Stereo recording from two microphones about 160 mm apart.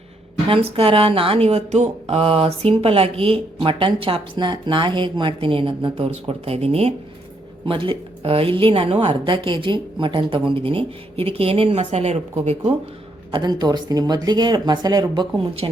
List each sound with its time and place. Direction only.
0.4 s speech: 35° right (ahead or behind)
13.3 s speech: 25° right (ahead or behind)